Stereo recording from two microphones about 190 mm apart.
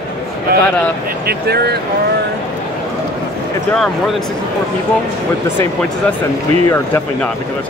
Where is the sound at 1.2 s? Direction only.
55° right (ahead or behind).